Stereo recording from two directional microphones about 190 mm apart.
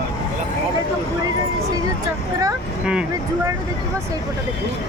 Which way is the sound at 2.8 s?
5° right (ahead or behind).